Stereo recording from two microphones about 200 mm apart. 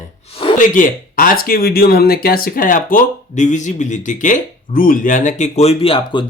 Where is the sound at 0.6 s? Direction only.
40° left (ahead or behind).